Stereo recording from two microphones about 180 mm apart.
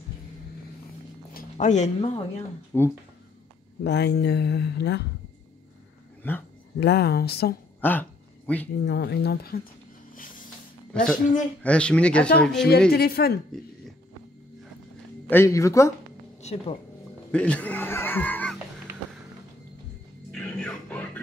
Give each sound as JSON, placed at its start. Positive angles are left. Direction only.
{"t": 1.3, "sound": "a sound", "side_deg": 40}
{"t": 2.7, "sound": "speech", "side_deg": 10}
{"t": 3.8, "sound": "speech", "side_deg": 70}
{"t": 6.2, "sound": "speech", "side_deg": 10}
{"t": 6.8, "sound": "speech", "side_deg": 65}
{"t": 7.8, "sound": "a sound", "side_deg": 10}
{"t": 8.8, "sound": "speech", "side_deg": 70}
{"t": 10.9, "sound": "a woman's voice", "side_deg": 5}
{"t": 12.9, "sound": "speech", "side_deg": 60}
{"t": 15.2, "sound": "speech", "side_deg": 15}
{"t": 16.3, "sound": "speech", "side_deg": 40}
{"t": 17.3, "sound": "speech", "side_deg": 5}
{"t": 20.2, "sound": "music", "side_deg": 5}